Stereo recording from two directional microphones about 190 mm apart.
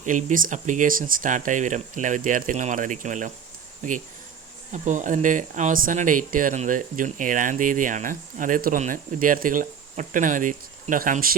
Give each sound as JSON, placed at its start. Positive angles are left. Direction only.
{"t": 0.0, "sound": "speech", "side_deg": -40}